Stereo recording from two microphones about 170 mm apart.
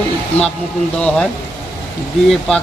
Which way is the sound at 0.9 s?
5° left (ahead or behind).